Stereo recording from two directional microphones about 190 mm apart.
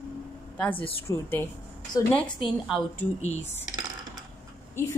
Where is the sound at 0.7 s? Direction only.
30° left (ahead or behind).